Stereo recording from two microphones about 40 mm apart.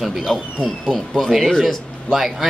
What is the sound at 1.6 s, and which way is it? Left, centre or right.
Speech, centre.